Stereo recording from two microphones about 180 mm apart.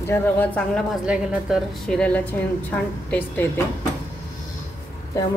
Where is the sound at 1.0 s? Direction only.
5° right (ahead or behind).